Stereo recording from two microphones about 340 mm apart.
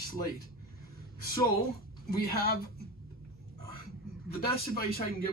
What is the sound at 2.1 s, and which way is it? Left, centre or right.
Speech, left.